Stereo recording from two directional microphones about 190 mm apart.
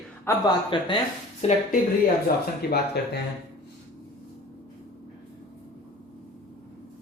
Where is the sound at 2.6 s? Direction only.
55° left (ahead or behind).